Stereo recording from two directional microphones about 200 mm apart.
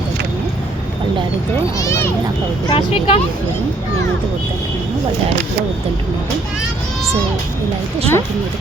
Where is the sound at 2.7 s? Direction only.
30° left (ahead or behind).